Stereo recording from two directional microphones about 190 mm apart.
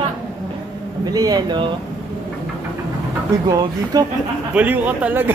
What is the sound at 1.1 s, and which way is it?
Speech, 20° right (ahead or behind).